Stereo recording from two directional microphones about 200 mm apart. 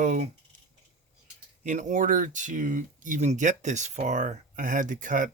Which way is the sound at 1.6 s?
40° right (ahead or behind).